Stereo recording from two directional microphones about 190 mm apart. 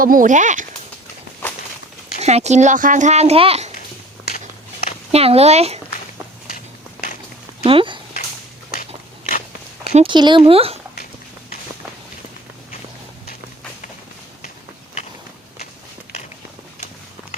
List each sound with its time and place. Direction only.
0.0 s a child's voice: 45° right (ahead or behind)
2.1 s a child's voice: 35° right (ahead or behind)
5.1 s a child's voice: 30° right (ahead or behind)
7.6 s speech: 30° right (ahead or behind)
8.7 s biting: 50° left (ahead or behind)
9.9 s speech: 25° right (ahead or behind)